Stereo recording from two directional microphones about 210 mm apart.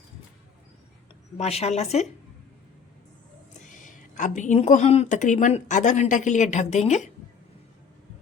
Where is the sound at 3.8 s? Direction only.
35° left (ahead or behind).